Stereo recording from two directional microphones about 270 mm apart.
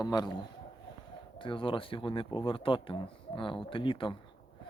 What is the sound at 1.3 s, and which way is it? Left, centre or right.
Speech, centre.